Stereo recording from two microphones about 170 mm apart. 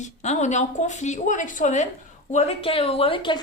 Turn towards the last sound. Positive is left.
turn(degrees=30)  # may be behind; listen again after turning